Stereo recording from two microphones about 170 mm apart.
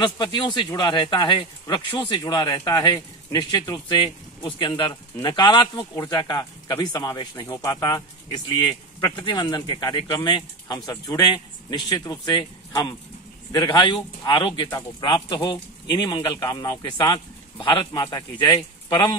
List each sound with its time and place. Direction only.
0.0 s speech: 25° left (ahead or behind)